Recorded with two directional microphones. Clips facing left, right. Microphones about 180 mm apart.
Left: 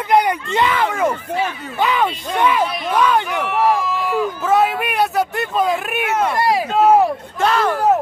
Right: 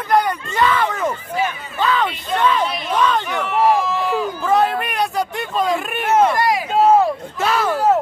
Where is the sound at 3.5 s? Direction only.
20° right (ahead or behind).